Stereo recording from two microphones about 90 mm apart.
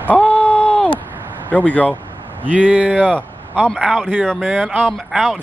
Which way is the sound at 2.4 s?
15° right (ahead or behind).